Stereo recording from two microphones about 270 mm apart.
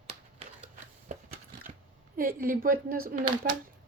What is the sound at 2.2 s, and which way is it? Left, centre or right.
Speech, right.